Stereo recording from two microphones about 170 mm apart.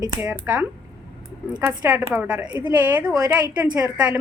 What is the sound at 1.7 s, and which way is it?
A woman's voice, 15° right (ahead or behind).